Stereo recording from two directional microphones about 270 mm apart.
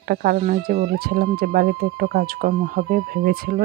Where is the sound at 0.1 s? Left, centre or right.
Right.